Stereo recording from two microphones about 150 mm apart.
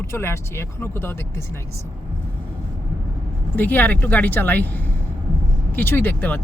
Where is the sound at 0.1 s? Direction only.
15° left (ahead or behind).